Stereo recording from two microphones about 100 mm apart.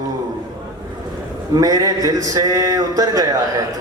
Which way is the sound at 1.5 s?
40° right (ahead or behind).